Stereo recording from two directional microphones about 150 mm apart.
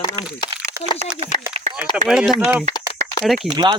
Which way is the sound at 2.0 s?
5° right (ahead or behind).